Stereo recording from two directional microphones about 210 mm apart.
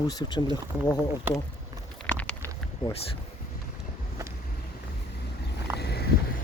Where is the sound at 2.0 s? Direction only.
5° left (ahead or behind).